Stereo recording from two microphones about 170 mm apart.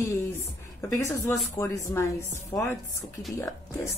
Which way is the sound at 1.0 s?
15° left (ahead or behind).